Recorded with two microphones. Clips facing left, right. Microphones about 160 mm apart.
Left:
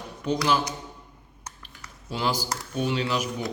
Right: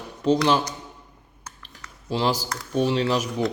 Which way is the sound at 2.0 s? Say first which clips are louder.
Right 4 dB; 30° right (ahead or behind).